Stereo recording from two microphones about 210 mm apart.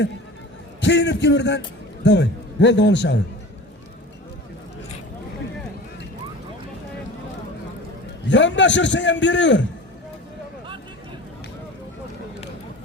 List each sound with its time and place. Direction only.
0.8 s a man's voice: 55° left (ahead or behind)
8.3 s a man's voice: 60° left (ahead or behind)